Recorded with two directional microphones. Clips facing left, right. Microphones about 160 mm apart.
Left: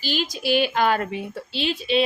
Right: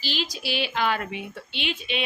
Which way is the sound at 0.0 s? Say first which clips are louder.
Left 5 dB; 50° left (ahead or behind).